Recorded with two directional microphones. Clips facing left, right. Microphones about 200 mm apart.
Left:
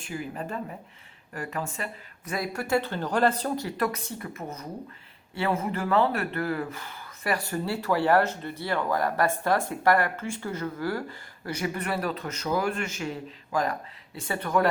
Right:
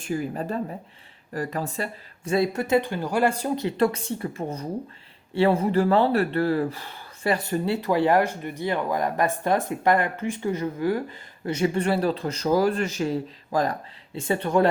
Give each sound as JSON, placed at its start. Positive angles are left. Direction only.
{"t": 0.0, "sound": "speech", "side_deg": -40}